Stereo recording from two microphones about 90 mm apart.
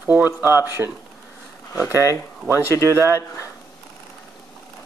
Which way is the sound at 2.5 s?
35° left (ahead or behind).